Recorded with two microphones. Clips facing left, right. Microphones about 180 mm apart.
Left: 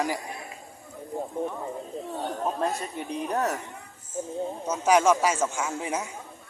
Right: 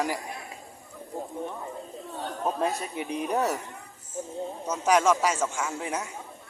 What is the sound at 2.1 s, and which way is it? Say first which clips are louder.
Chatter: left 3 dB; 20° left (ahead or behind).